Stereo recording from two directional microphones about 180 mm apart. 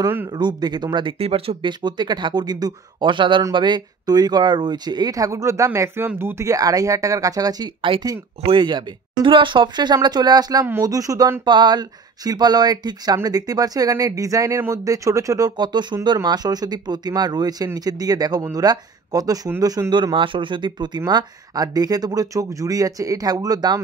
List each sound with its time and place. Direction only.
0.0 s speech: 10° right (ahead or behind)
0.4 s speech: 25° right (ahead or behind)